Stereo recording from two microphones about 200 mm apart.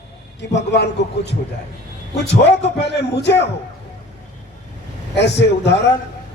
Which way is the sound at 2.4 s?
60° left (ahead or behind).